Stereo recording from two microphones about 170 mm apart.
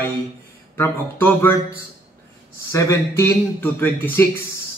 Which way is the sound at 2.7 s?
20° left (ahead or behind).